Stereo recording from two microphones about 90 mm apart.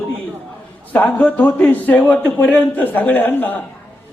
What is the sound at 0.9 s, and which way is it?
A man's voice, 20° left (ahead or behind).